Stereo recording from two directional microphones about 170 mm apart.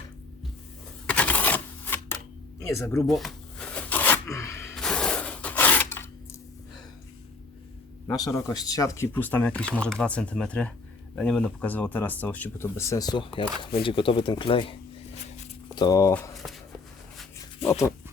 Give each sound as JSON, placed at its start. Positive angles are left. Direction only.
{"t": 1.0, "sound": "crushing", "side_deg": 5}
{"t": 2.6, "sound": "speech", "side_deg": 15}
{"t": 3.1, "sound": "zipper", "side_deg": 0}
{"t": 4.7, "sound": "a sound", "side_deg": 5}
{"t": 8.0, "sound": "speech", "side_deg": 20}
{"t": 17.6, "sound": "dog", "side_deg": 35}